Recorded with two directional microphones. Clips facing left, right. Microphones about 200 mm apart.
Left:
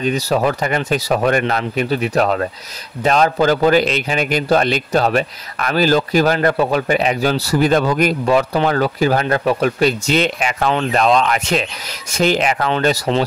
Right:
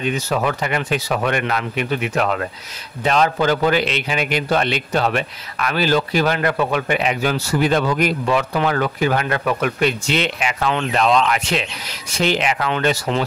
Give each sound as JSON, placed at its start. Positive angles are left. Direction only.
{"t": 0.0, "sound": "a man's voice", "side_deg": 35}